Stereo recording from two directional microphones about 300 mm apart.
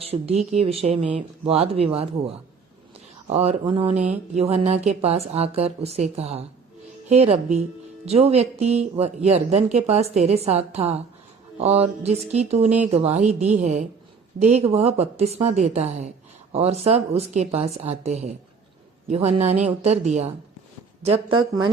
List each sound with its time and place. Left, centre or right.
0.0 s a woman's voice: centre